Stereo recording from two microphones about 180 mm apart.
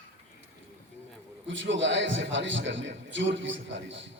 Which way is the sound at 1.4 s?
90° right.